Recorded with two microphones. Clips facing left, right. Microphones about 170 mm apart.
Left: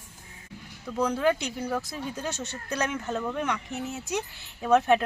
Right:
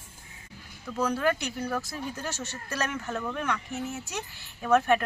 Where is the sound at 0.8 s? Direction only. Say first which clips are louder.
Left 2 dB; 15° left (ahead or behind).